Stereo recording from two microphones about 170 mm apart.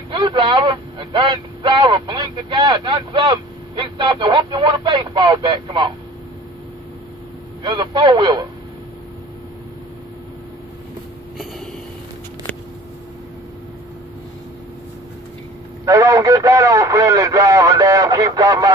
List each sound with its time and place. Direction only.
0.1 s speech: 25° right (ahead or behind)
7.6 s speech: 25° right (ahead or behind)
15.8 s speech: 20° right (ahead or behind)